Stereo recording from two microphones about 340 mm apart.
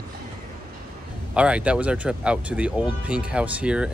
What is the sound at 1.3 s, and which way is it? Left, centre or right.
Speech, centre.